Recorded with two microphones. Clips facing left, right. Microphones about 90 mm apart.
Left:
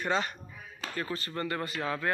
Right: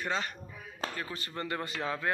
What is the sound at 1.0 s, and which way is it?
Speech, 15° right (ahead or behind).